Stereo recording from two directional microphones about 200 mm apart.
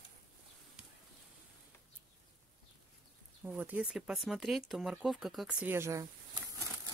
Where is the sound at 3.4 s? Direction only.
5° right (ahead or behind).